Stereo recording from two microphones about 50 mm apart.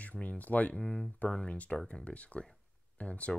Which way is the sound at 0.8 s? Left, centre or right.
Centre.